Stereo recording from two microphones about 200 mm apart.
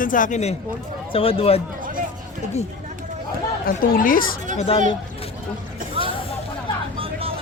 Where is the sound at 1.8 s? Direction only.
45° right (ahead or behind).